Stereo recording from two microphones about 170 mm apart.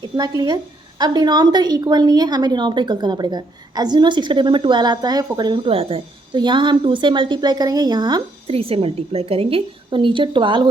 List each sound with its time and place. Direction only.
0.0 s a woman's voice: 20° right (ahead or behind)